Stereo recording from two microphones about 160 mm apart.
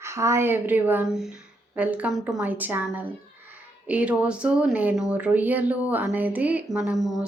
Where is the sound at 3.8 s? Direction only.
10° right (ahead or behind).